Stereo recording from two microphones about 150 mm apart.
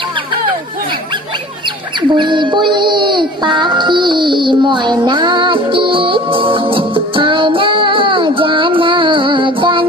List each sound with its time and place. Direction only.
2.1 s music: 30° right (ahead or behind)